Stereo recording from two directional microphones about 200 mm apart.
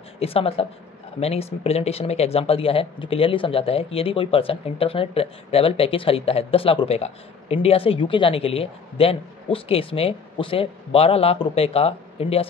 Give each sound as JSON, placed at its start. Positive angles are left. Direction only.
{"t": 0.2, "sound": "speech", "side_deg": 30}